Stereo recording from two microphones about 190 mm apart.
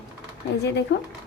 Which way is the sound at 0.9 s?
65° left (ahead or behind).